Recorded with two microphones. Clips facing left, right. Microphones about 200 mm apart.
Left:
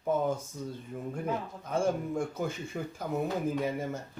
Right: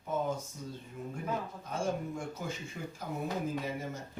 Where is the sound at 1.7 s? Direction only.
55° left (ahead or behind).